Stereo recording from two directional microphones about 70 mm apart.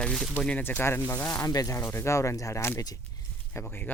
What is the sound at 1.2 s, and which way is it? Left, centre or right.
Speech, left.